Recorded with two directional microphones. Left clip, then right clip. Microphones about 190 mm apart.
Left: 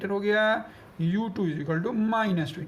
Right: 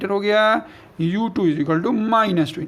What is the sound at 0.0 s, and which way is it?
Speech, 50° right (ahead or behind).